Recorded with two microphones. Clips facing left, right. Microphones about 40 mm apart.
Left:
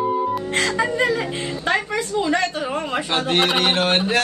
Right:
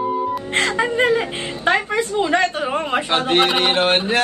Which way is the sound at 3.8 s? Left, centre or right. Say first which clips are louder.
Right 2 dB; right.